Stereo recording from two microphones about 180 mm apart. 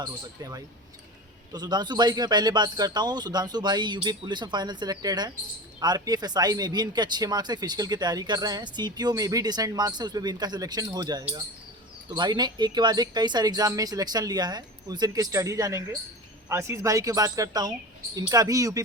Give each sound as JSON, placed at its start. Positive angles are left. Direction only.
{"t": 0.0, "sound": "speech", "side_deg": -20}